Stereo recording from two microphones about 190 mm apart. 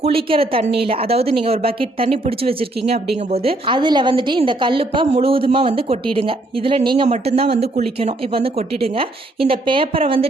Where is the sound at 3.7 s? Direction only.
25° right (ahead or behind).